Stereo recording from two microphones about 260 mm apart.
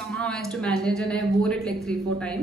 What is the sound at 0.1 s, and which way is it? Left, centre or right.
A woman's voice, centre.